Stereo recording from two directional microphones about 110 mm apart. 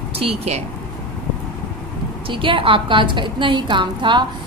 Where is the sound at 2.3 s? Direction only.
50° right (ahead or behind).